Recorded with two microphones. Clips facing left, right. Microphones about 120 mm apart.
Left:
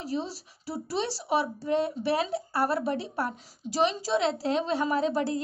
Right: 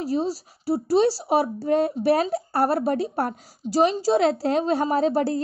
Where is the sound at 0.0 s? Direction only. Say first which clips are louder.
Right 8 dB; 40° right (ahead or behind).